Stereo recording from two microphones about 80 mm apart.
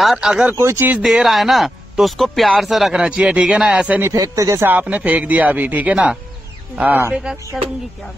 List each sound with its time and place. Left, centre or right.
0.0 s speech: centre
0.5 s speech: right
1.0 s speech: centre
4.1 s speech: right
4.6 s speech: right